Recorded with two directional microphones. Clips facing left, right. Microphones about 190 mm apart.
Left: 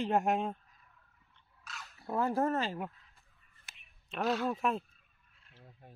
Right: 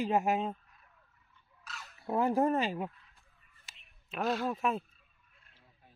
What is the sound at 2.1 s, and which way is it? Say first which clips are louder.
Speech: right 3 dB; 15° right (ahead or behind).